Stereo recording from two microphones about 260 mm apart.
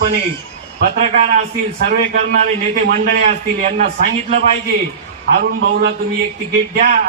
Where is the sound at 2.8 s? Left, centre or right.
Right.